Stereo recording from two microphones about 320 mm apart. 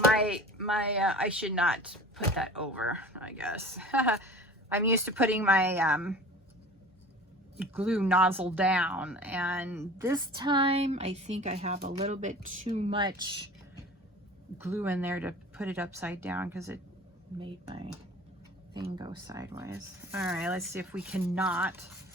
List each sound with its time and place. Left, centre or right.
1.1 s speech: centre
7.6 s speech: centre
14.6 s speech: centre